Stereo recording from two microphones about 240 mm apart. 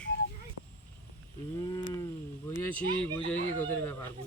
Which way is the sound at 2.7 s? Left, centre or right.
Centre.